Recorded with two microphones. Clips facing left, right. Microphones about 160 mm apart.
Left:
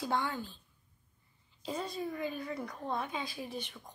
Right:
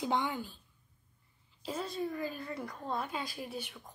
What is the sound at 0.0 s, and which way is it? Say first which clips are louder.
Speech: right 1 dB; 20° right (ahead or behind).